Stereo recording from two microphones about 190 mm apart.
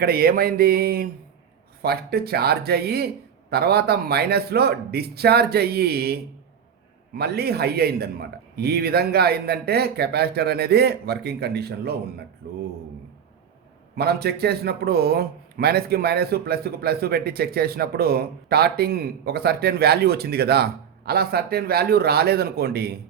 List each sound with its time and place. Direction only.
0.0 s a man's voice: 50° right (ahead or behind)
7.2 s a man's voice: 55° right (ahead or behind)
13.9 s a man's voice: 55° right (ahead or behind)